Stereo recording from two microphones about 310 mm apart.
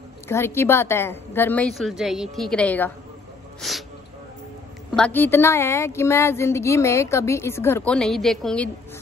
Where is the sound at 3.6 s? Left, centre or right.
Centre.